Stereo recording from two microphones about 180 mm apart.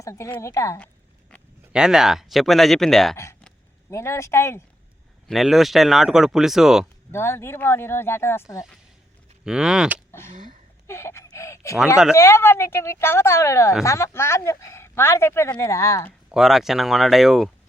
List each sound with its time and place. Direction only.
0.0 s speech: 15° left (ahead or behind)
1.7 s speech: 5° right (ahead or behind)
3.8 s speech: 15° left (ahead or behind)
5.3 s speech: centre (ahead or behind)
7.1 s speech: 15° left (ahead or behind)
9.4 s speech: 5° right (ahead or behind)
10.8 s speech: 15° left (ahead or behind)
16.3 s speech: centre (ahead or behind)